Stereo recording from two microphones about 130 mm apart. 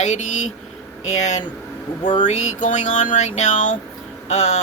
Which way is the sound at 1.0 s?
65° left (ahead or behind).